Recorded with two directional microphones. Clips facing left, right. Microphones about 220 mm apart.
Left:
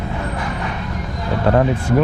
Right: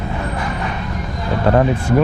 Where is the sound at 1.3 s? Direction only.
20° right (ahead or behind).